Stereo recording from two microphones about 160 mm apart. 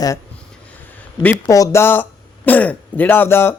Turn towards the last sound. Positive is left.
turn(degrees=15)  # may be behind; listen again after turning